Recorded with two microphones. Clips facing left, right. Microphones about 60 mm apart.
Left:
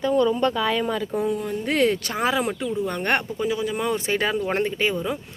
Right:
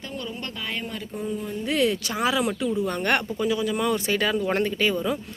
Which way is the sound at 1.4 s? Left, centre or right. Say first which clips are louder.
Right 1 dB; left.